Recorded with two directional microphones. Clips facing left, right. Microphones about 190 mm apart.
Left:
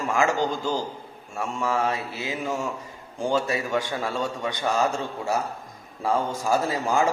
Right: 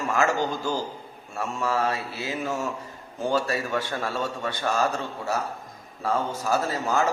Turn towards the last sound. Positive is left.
turn(degrees=15)  # may be behind; listen again after turning